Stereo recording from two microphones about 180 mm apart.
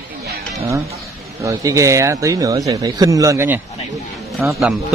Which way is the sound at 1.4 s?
15° right (ahead or behind).